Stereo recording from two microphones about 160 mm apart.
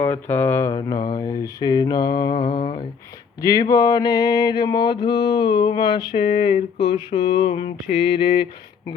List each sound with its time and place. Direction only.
0.0 s speech: 15° left (ahead or behind)
0.7 s mantra: 25° left (ahead or behind)